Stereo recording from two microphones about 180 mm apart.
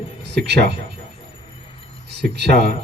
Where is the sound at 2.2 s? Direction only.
60° right (ahead or behind).